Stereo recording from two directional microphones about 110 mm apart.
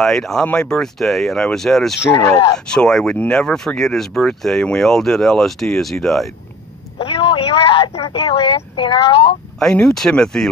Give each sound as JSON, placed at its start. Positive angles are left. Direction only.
{"t": 0.0, "sound": "speech", "side_deg": 5}
{"t": 7.0, "sound": "a sound", "side_deg": 55}
{"t": 8.1, "sound": "speech", "side_deg": 55}
{"t": 9.6, "sound": "speech", "side_deg": 5}